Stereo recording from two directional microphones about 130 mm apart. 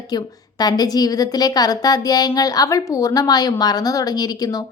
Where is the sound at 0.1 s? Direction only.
30° left (ahead or behind).